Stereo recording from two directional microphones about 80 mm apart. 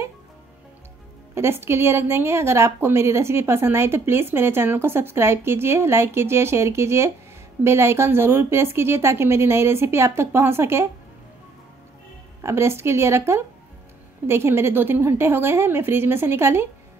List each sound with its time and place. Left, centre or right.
1.3 s a woman's voice: right
12.4 s a woman's voice: right